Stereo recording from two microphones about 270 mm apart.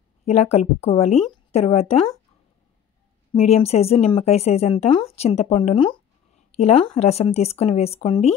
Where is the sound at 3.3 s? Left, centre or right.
Left.